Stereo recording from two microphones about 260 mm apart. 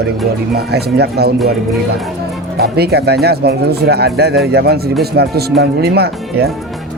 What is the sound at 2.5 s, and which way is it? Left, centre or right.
Speech, right.